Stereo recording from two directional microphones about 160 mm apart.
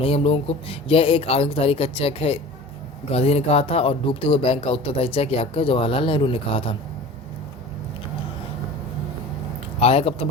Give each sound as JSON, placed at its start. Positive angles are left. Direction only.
{"t": 0.0, "sound": "speech", "side_deg": 35}
{"t": 9.8, "sound": "a man's voice", "side_deg": 40}